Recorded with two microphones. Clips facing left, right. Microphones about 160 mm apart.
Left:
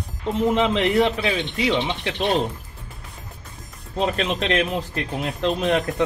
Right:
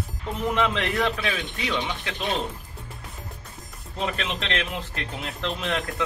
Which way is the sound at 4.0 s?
40° left (ahead or behind).